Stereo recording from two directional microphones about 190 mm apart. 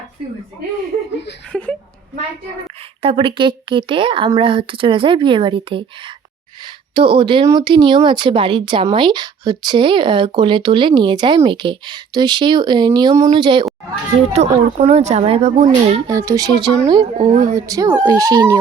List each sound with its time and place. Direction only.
1.5 s a woman's voice: 5° left (ahead or behind)
3.0 s speech: 30° right (ahead or behind)
6.9 s speech: 25° right (ahead or behind)
16.0 s speech: 15° right (ahead or behind)